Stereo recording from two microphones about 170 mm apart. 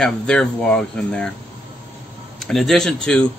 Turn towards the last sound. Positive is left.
turn(degrees=5)  # may be behind; listen again after turning